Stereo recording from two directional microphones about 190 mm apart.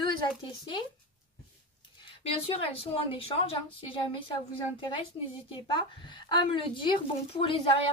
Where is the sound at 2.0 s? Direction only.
30° left (ahead or behind).